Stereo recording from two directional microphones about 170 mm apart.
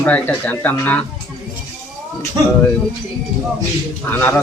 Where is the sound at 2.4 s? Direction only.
25° right (ahead or behind).